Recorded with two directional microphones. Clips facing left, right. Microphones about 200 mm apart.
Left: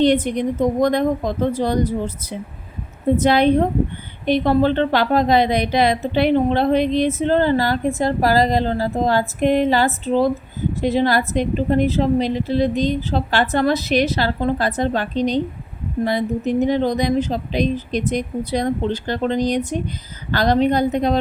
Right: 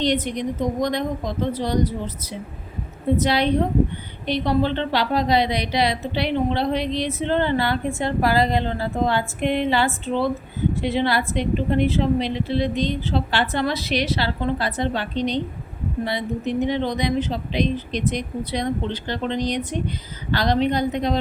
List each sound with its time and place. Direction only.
0.0 s a woman's voice: 50° left (ahead or behind)
3.2 s a woman's voice: 50° left (ahead or behind)